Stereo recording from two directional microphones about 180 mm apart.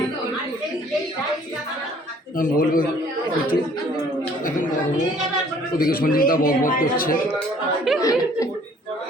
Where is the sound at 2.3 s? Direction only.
50° left (ahead or behind).